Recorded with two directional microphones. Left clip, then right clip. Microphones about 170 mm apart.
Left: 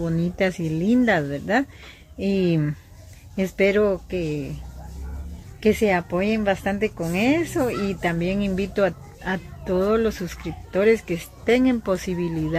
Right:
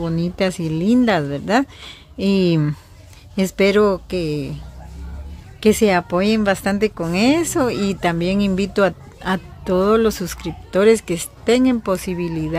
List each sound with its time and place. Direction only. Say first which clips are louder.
0.0 s speech: right 3 dB; 20° right (ahead or behind)
5.6 s speech: right 5 dB; 30° right (ahead or behind)